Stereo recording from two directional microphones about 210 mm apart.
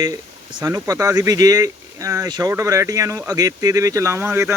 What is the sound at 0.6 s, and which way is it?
Speech, 15° right (ahead or behind).